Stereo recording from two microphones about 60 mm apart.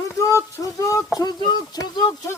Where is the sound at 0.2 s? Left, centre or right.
Left.